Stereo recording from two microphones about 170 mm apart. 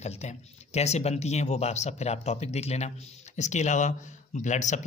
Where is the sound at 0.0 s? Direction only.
40° left (ahead or behind).